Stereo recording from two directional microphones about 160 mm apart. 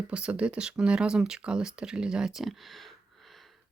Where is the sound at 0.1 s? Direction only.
5° right (ahead or behind).